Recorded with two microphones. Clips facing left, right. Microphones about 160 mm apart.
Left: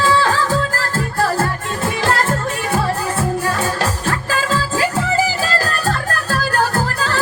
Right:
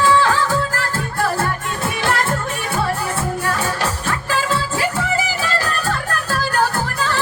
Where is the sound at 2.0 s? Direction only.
35° left (ahead or behind).